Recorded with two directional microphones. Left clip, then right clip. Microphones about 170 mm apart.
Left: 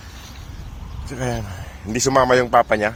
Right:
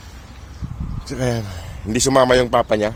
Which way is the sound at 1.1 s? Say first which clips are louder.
Right 3 dB; 35° right (ahead or behind).